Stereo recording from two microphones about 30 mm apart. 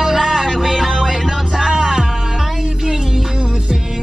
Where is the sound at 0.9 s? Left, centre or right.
Centre.